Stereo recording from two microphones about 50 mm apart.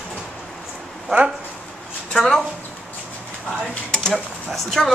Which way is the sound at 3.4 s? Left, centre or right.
Centre.